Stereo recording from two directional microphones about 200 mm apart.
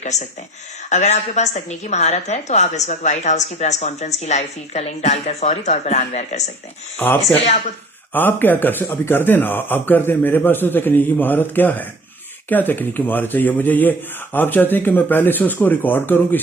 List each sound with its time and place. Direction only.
0.0 s a woman's voice: 35° left (ahead or behind)
7.0 s speech: 10° left (ahead or behind)